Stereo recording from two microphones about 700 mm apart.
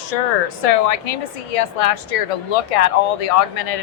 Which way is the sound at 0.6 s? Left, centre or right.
Left.